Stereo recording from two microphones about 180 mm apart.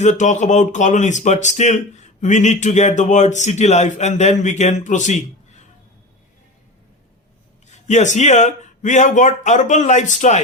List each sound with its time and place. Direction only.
0.0 s speech: 40° left (ahead or behind)
7.7 s speech: 40° left (ahead or behind)